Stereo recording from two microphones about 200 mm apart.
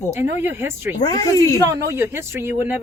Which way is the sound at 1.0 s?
20° left (ahead or behind).